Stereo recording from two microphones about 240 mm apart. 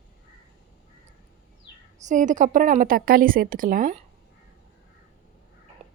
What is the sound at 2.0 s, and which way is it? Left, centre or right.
A woman's voice, right.